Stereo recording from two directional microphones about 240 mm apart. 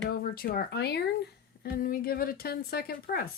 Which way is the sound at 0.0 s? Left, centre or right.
Left.